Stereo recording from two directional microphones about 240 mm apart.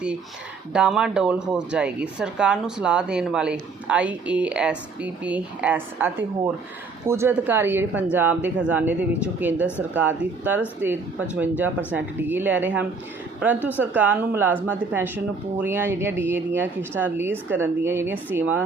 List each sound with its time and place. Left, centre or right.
0.7 s speech: centre